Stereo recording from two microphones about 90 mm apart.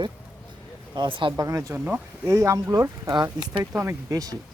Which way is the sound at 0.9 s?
70° right (ahead or behind).